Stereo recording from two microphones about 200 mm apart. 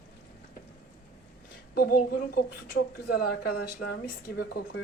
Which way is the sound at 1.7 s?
50° left (ahead or behind).